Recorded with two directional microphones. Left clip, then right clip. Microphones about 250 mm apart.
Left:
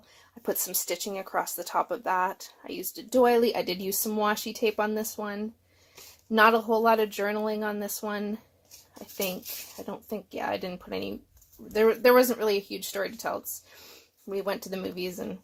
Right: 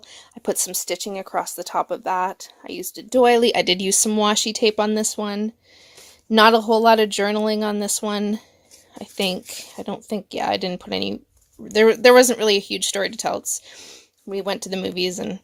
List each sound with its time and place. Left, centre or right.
0.4 s speech: right